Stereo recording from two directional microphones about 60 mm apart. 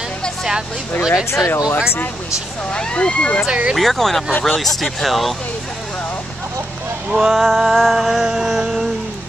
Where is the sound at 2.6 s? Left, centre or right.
Centre.